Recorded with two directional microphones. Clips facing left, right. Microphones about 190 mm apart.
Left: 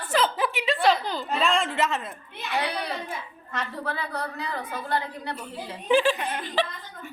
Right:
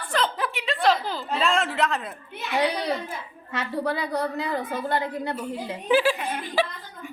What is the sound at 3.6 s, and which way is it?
Speech, 15° right (ahead or behind).